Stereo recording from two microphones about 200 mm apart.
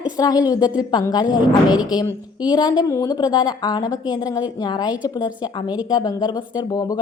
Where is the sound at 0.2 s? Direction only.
20° left (ahead or behind).